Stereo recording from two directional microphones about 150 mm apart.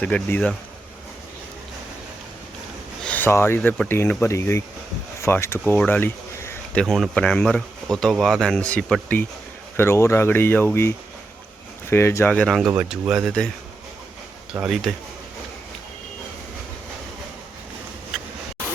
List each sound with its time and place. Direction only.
0.0 s speech: 10° left (ahead or behind)
3.0 s speech: 10° left (ahead or behind)
5.7 s a sound: 10° left (ahead or behind)
6.8 s speech: centre (ahead or behind); by 12.3 s 15° left (ahead or behind)
12.3 s speech: 5° left (ahead or behind)
14.6 s speech: centre (ahead or behind)